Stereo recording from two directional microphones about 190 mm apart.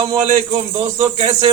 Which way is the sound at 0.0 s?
25° right (ahead or behind).